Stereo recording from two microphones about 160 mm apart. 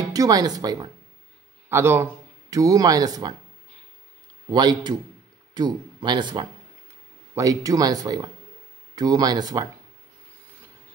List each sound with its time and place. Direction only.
0.1 s a man's voice: 25° right (ahead or behind)
4.5 s speech: 25° right (ahead or behind)